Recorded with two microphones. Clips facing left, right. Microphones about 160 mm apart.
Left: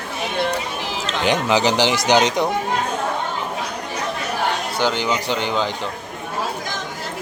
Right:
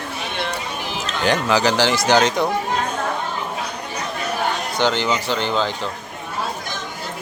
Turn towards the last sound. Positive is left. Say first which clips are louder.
# even
turn(degrees=15)  # may be behind; listen again after turning